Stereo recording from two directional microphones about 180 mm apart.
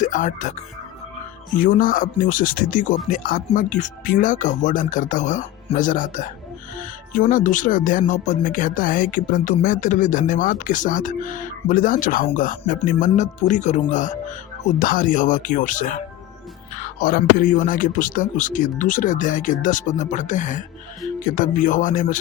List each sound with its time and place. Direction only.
0.0 s speech: 45° left (ahead or behind)
1.5 s speech: 45° left (ahead or behind)